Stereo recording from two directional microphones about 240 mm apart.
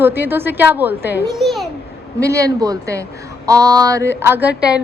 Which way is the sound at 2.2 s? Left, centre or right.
Centre.